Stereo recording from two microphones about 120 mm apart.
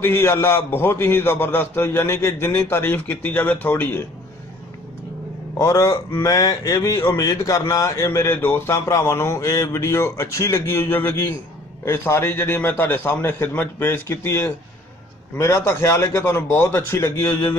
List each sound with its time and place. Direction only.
0.0 s a man's voice: 20° left (ahead or behind)
5.6 s a man's voice: 25° left (ahead or behind)